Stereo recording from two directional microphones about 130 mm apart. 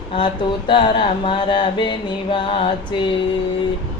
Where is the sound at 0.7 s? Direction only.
40° left (ahead or behind).